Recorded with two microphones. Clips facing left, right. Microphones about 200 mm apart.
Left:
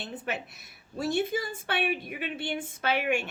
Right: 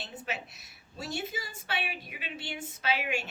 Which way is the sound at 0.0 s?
55° left (ahead or behind).